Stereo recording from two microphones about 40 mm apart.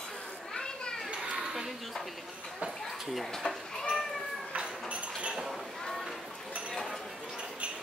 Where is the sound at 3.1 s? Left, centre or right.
Centre.